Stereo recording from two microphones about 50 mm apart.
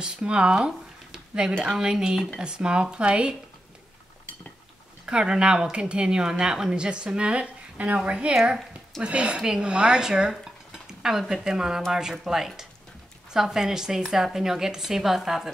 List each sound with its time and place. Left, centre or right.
0.0 s a woman's voice: centre
5.0 s a woman's voice: centre